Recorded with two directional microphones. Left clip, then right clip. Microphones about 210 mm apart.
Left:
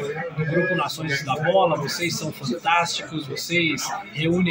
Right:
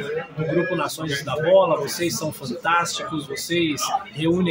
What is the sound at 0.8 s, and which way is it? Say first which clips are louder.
A man's voice: left 1 dB; 20° right (ahead or behind).